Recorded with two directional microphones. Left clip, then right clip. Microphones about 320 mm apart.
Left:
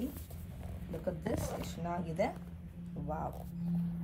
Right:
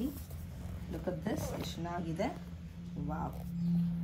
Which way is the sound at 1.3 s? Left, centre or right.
Left.